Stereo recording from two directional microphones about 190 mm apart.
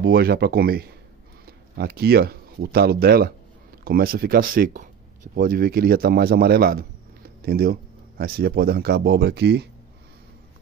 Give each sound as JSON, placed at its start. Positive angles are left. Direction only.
{"t": 0.0, "sound": "a man's voice", "side_deg": -55}